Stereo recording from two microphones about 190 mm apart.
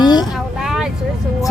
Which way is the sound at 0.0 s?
20° left (ahead or behind).